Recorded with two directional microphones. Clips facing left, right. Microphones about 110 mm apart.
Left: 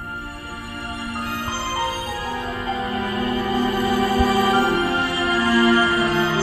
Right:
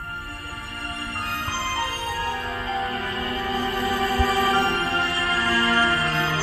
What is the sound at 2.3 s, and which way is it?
Music, 15° left (ahead or behind).